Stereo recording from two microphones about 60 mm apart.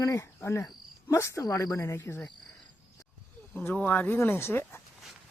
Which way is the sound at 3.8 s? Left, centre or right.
Left.